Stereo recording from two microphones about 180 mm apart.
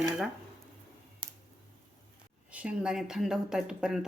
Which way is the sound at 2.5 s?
5° right (ahead or behind).